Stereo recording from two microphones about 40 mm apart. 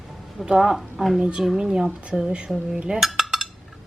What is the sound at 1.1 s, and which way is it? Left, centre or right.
A woman's voice, right.